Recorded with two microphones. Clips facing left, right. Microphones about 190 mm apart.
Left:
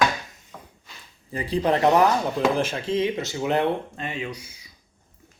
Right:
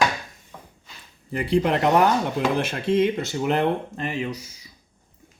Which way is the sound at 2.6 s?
60° right (ahead or behind).